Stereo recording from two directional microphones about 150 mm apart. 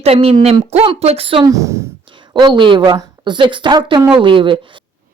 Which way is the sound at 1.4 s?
20° right (ahead or behind).